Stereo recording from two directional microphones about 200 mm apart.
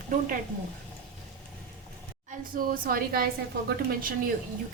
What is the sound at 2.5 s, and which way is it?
Speech, 45° right (ahead or behind).